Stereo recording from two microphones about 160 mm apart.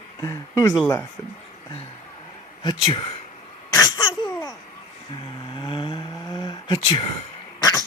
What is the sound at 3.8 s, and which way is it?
Laughter, 25° left (ahead or behind).